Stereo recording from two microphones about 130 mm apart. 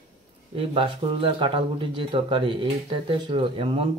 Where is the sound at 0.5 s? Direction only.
45° right (ahead or behind).